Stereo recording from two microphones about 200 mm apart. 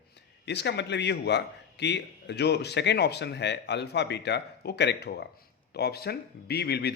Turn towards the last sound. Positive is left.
turn(degrees=55)  # may be behind; listen again after turning